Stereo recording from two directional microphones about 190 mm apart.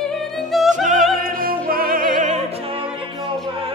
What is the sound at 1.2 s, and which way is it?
Music, 50° right (ahead or behind).